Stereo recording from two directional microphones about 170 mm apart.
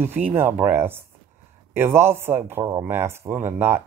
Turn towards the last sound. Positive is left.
turn(degrees=-10)  # may be behind; listen again after turning